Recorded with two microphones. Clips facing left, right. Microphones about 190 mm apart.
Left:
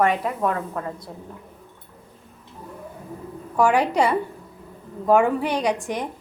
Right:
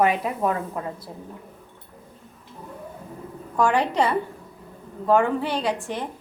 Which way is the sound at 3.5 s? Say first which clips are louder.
Left 2 dB; 10° left (ahead or behind).